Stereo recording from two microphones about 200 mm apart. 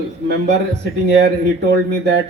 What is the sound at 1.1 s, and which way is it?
A man's voice, 55° right (ahead or behind).